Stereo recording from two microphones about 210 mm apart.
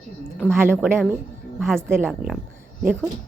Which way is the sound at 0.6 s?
10° right (ahead or behind).